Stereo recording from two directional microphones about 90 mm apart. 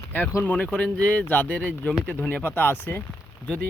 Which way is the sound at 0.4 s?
15° left (ahead or behind).